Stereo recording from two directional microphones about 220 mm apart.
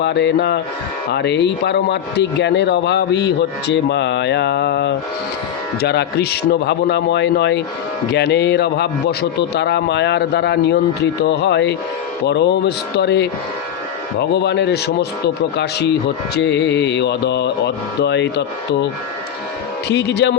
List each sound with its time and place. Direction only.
0.0 s speech: 50° left (ahead or behind)
19.9 s speech: 50° left (ahead or behind)